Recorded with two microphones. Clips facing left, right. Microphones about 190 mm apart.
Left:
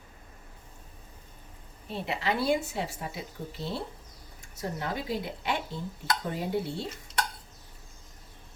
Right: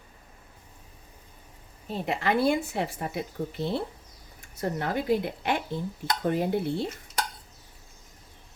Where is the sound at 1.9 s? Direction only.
45° right (ahead or behind).